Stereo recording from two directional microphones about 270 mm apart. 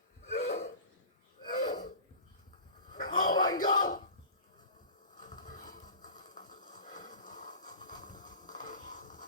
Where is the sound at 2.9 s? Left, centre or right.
Centre.